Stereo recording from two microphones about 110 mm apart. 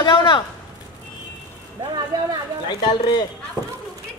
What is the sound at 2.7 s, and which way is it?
Speech, 45° left (ahead or behind).